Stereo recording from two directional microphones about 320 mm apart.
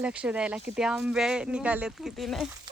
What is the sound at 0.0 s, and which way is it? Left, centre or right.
Speech, centre.